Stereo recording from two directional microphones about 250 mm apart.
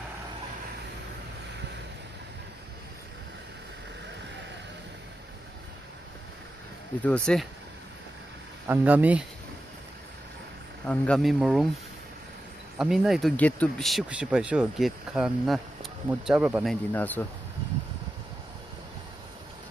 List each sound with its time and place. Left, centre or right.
7.0 s speech: centre
8.6 s speech: centre
10.9 s speech: centre
12.7 s speech: centre
16.9 s speech: centre